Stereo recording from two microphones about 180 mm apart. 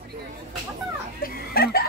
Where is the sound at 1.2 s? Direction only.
55° left (ahead or behind).